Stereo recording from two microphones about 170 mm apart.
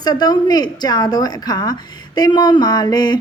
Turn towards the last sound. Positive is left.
turn(degrees=25)  # may be behind; listen again after turning